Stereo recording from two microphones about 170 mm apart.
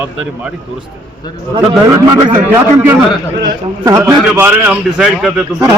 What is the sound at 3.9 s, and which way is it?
Speech, 20° right (ahead or behind).